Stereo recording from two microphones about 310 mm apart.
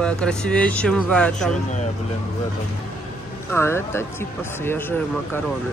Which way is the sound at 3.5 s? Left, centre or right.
Centre.